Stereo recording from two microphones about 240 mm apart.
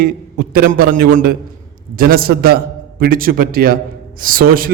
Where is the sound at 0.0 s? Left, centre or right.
Right.